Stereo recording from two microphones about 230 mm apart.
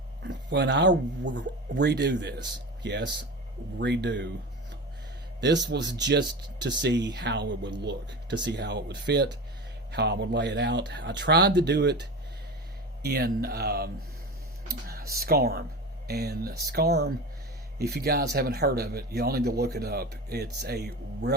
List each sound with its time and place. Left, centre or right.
0.2 s speech: right
5.4 s speech: right
13.0 s speech: right